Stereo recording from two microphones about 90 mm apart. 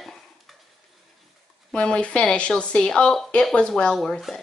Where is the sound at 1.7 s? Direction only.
10° left (ahead or behind).